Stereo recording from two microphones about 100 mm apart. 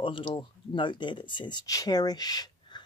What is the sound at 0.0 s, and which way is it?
Speech, 55° left (ahead or behind).